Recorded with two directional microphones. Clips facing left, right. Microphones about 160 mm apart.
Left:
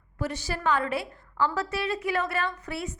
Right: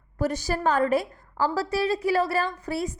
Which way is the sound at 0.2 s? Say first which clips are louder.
Right 6 dB; 40° right (ahead or behind).